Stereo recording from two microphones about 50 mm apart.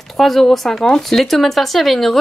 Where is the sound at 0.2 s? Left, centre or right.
Centre.